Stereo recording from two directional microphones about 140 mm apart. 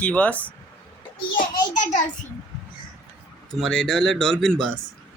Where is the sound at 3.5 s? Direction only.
5° left (ahead or behind).